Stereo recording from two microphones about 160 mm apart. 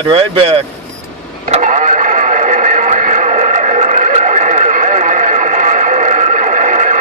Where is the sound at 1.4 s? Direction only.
50° right (ahead or behind).